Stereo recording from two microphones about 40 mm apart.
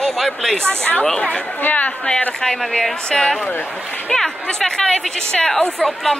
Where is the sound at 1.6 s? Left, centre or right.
Left.